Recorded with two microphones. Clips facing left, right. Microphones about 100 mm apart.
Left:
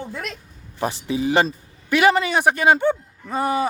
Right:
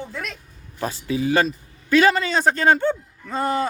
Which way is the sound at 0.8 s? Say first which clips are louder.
Left 1 dB; 20° left (ahead or behind).